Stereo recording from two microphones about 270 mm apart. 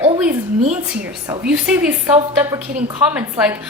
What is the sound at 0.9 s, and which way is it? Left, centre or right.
A woman's voice, centre.